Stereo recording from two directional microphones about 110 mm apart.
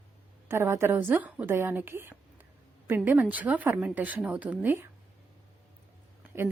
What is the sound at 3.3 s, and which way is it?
Speech, 15° right (ahead or behind).